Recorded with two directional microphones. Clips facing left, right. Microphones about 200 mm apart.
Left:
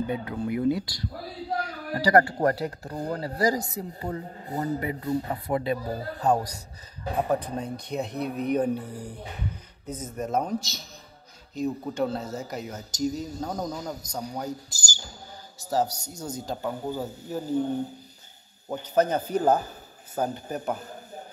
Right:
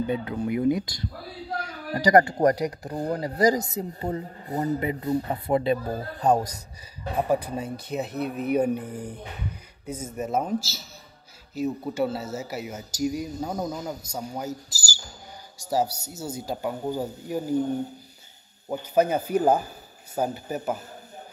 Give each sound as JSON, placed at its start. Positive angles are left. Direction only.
{"t": 0.0, "sound": "speech", "side_deg": -20}
{"t": 7.2, "sound": "speech", "side_deg": -10}
{"t": 9.8, "sound": "speech", "side_deg": -10}
{"t": 18.7, "sound": "speech", "side_deg": -10}